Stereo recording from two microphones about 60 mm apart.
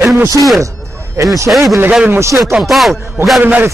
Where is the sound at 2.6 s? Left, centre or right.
Centre.